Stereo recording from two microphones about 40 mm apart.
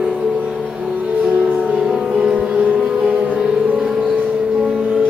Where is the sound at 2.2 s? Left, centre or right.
Right.